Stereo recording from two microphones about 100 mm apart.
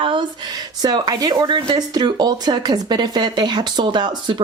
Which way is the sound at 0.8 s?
40° right (ahead or behind).